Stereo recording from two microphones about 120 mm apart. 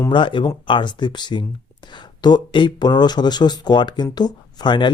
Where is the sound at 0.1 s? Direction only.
40° left (ahead or behind).